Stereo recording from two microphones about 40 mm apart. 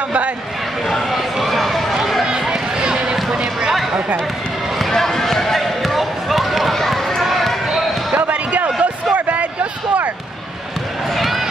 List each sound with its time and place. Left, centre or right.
1.1 s run: centre
2.5 s a sound: right
4.7 s basketball bounce: centre
8.3 s a sound: right
9.1 s basketball bounce: right
11.1 s crowd: centre